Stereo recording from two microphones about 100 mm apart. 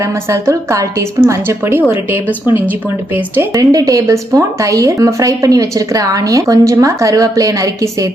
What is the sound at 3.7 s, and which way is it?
A woman's voice, 35° right (ahead or behind).